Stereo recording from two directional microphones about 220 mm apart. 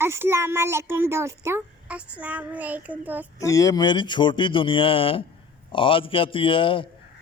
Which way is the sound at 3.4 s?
15° left (ahead or behind).